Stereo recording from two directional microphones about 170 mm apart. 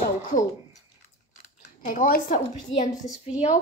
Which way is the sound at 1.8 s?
55° left (ahead or behind).